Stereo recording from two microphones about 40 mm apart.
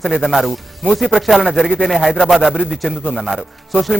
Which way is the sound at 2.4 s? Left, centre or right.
Right.